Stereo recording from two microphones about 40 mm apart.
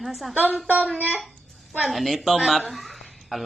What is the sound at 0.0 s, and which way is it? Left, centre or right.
Speech, centre.